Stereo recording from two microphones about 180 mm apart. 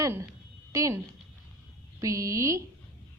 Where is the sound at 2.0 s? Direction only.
20° right (ahead or behind).